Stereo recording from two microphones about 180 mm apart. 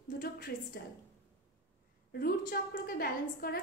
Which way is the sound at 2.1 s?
55° left (ahead or behind).